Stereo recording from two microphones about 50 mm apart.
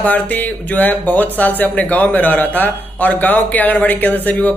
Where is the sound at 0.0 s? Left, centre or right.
Left.